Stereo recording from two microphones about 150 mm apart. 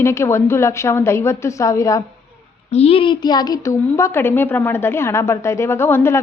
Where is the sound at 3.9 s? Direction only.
15° left (ahead or behind).